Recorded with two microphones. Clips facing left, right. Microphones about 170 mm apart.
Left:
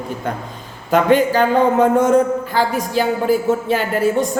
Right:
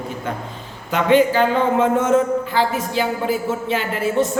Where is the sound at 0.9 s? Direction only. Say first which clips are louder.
Left 1 dB; 40° left (ahead or behind).